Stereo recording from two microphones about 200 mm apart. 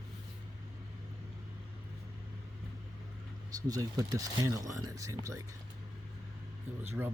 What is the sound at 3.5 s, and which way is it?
Speech, 20° right (ahead or behind).